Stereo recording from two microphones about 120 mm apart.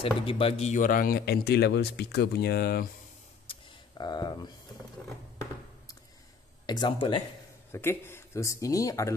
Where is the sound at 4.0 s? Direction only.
35° left (ahead or behind).